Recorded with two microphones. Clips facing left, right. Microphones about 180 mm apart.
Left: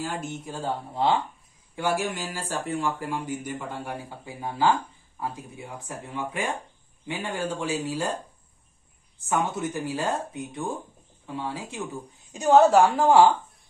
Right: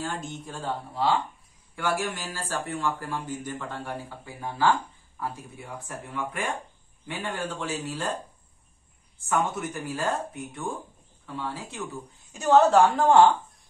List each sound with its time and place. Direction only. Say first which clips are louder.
0.0 s speech: left 2 dB; 10° left (ahead or behind)
0.6 s speech: left 2 dB; 20° left (ahead or behind)
9.3 s speech: left 1 dB; 20° left (ahead or behind)
11.2 s speech: left 2 dB; 15° left (ahead or behind)